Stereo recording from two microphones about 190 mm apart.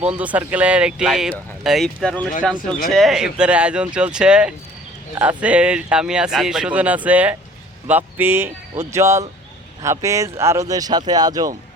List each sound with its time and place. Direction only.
0.3 s speech: 5° right (ahead or behind)